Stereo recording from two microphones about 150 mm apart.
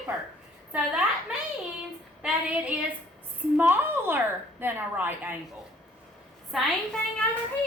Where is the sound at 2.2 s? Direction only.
10° right (ahead or behind).